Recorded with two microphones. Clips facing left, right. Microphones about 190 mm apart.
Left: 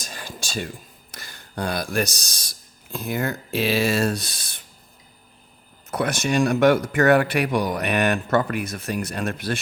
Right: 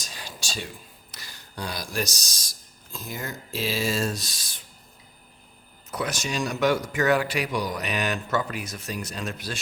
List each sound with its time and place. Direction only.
0.0 s whispering: 50° left (ahead or behind)
1.1 s speech: 55° left (ahead or behind)
5.9 s a man's voice: 55° left (ahead or behind)